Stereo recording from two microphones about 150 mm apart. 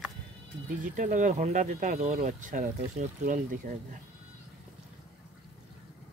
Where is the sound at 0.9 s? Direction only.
60° right (ahead or behind).